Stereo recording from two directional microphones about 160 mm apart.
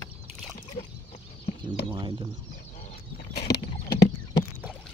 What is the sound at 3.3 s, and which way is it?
Horse, 85° left.